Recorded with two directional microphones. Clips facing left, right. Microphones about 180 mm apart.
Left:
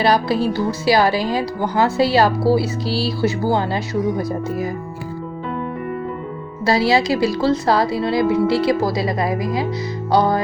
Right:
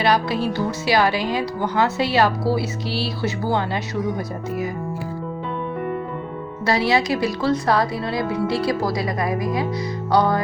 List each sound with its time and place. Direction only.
0.0 s speech: 35° left (ahead or behind)
6.7 s speech: 30° left (ahead or behind)